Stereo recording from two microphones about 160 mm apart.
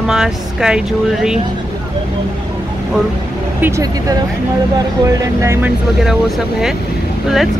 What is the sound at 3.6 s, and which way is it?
Speech, 20° right (ahead or behind).